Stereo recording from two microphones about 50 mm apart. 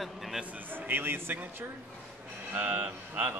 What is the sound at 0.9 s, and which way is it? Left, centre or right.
Speech, right.